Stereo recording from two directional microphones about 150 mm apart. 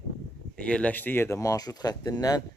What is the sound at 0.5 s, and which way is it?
Speech, 5° left (ahead or behind).